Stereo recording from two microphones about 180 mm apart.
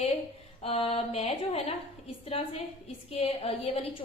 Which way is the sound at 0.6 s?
30° left (ahead or behind).